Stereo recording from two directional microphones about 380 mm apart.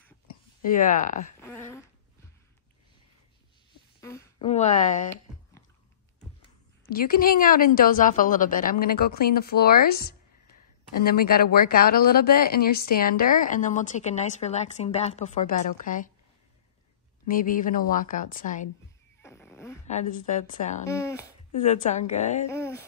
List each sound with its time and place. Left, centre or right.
0.7 s speech: left
4.0 s speech: centre
6.9 s speech: left
17.3 s speech: left
19.2 s a sound: centre
19.9 s speech: centre
20.9 s a woman's voice: centre
21.6 s a woman's voice: centre
22.5 s a woman's voice: centre